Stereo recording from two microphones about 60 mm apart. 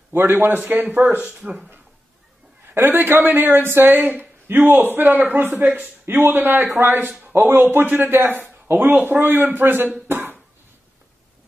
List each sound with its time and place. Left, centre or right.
0.1 s a man's voice: right
1.4 s a man's voice: centre
2.7 s speech: right
5.5 s a man's voice: centre
5.8 s a man's voice: right
7.7 s a man's voice: right
8.0 s speech: right
9.2 s a man's voice: right
9.5 s speech: right
10.0 s cough: right